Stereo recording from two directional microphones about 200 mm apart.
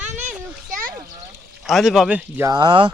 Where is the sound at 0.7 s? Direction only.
45° right (ahead or behind).